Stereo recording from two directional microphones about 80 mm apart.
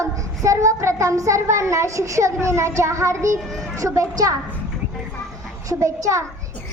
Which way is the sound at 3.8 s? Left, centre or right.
Right.